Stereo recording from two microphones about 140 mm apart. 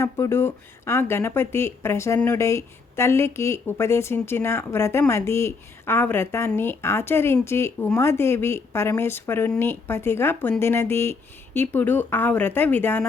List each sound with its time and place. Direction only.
0.0 s speech: 20° left (ahead or behind)